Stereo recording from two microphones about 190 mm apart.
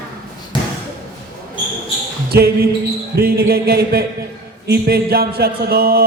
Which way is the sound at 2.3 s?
55° right (ahead or behind).